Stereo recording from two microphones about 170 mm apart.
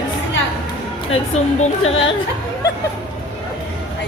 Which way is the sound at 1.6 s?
35° left (ahead or behind).